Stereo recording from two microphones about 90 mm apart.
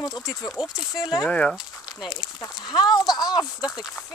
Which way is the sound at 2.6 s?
55° left (ahead or behind).